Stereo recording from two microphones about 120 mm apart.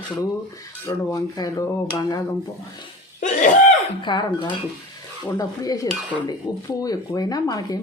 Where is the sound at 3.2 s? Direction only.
90° left.